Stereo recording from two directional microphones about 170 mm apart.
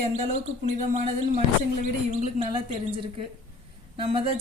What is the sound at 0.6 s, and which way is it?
Speech, 40° right (ahead or behind).